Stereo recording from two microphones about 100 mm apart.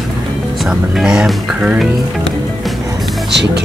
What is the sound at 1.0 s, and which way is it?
Speech, 5° right (ahead or behind).